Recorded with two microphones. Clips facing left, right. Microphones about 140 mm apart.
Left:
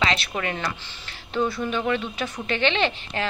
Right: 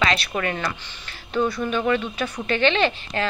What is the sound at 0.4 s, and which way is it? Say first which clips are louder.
Speech: right 2 dB; 20° left (ahead or behind).